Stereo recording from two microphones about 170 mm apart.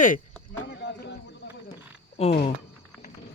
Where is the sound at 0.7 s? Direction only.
80° left.